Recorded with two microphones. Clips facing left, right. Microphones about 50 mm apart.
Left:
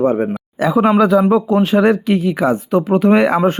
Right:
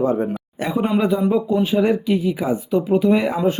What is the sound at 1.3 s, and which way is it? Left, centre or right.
Speech, left.